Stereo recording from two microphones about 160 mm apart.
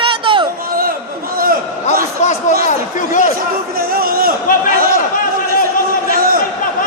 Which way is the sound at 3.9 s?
65° right (ahead or behind).